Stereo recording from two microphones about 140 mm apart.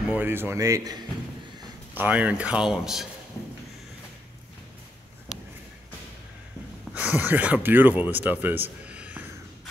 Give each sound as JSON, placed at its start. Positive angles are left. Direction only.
{"t": 0.1, "sound": "speech", "side_deg": -15}
{"t": 2.0, "sound": "speech", "side_deg": -10}
{"t": 6.9, "sound": "speech", "side_deg": -10}